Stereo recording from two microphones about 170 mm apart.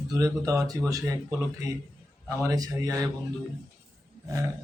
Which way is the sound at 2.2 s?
20° right (ahead or behind).